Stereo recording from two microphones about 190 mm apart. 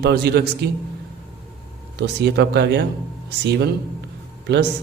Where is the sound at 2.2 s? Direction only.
60° right (ahead or behind).